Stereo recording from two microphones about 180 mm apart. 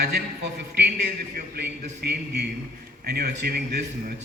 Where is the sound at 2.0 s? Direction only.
65° right (ahead or behind).